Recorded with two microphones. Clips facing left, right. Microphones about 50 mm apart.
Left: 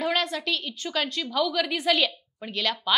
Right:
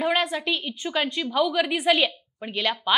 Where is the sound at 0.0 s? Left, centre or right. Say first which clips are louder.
Right 3 dB; centre.